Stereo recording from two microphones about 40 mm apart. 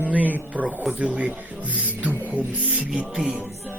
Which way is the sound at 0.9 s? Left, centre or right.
Right.